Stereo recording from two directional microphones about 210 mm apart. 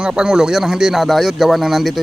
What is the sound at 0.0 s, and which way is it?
Speech, 5° right (ahead or behind).